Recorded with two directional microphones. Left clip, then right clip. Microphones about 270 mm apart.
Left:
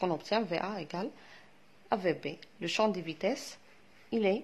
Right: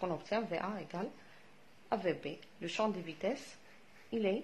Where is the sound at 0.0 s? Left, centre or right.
Left.